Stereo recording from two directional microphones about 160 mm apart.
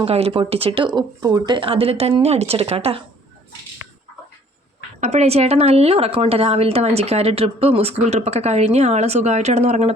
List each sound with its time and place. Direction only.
0.0 s a woman's voice: 40° right (ahead or behind)
4.9 s a woman's voice: 45° right (ahead or behind)